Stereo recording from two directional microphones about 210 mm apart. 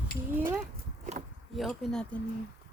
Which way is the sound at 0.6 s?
35° right (ahead or behind).